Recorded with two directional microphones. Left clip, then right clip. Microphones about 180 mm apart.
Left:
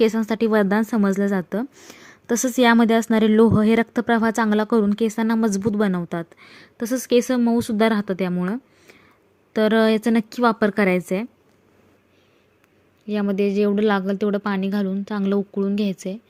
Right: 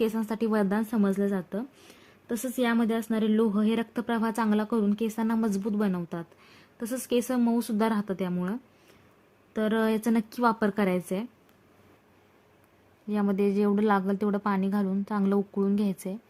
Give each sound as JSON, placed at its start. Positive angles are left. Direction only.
{"t": 0.0, "sound": "speech", "side_deg": 25}
{"t": 13.1, "sound": "a woman's voice", "side_deg": 10}